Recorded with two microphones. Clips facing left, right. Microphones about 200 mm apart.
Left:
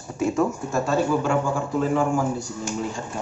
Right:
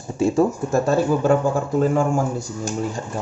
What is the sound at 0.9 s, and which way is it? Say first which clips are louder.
A man's voice: right 3 dB; 45° right (ahead or behind).